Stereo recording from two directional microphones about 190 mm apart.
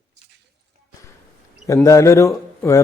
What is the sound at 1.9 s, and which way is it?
Speech, 15° left (ahead or behind).